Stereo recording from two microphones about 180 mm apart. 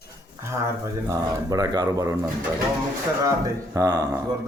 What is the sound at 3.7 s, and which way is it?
Speech, 20° right (ahead or behind).